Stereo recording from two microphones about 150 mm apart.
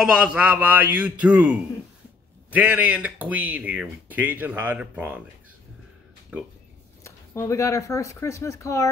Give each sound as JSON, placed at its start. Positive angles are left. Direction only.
{"t": 0.0, "sound": "speech", "side_deg": -5}
{"t": 6.3, "sound": "speech", "side_deg": -5}
{"t": 7.0, "sound": "speech", "side_deg": 20}